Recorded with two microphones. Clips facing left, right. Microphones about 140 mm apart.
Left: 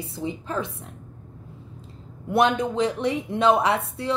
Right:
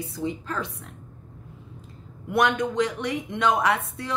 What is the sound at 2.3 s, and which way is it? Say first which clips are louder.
A woman's voice: left 2 dB; 30° left (ahead or behind).